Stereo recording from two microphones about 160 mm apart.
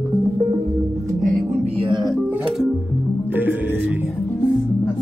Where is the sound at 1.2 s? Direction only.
55° right (ahead or behind).